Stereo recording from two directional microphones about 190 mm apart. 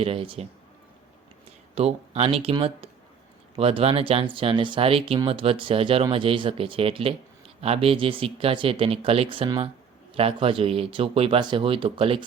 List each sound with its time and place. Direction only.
0.0 s speech: 30° right (ahead or behind)
1.7 s speech: 35° right (ahead or behind)